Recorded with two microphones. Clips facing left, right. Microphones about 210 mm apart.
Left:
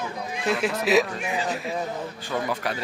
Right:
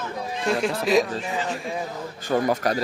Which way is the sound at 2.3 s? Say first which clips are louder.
Right 7 dB; 40° right (ahead or behind).